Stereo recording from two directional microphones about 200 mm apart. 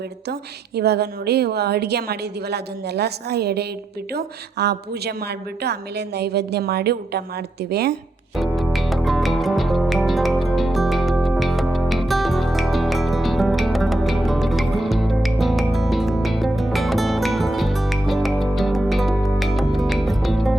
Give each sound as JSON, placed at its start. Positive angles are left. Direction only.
{"t": 0.8, "sound": "a woman's voice", "side_deg": -55}
{"t": 8.4, "sound": "music", "side_deg": 0}